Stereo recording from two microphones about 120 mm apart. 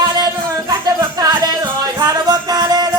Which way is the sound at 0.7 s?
30° right (ahead or behind).